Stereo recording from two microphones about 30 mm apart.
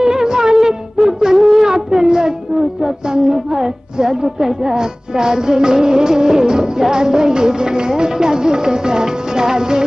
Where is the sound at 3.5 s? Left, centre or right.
Centre.